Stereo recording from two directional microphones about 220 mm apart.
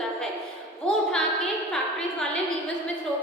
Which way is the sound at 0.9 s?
5° left (ahead or behind).